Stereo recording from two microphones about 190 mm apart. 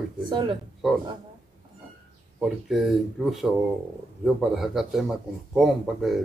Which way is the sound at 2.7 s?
Centre (ahead or behind).